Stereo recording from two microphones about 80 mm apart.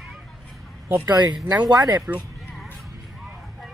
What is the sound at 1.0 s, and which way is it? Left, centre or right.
Speech, right.